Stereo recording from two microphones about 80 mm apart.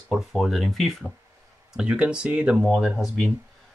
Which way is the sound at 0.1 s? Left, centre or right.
Centre.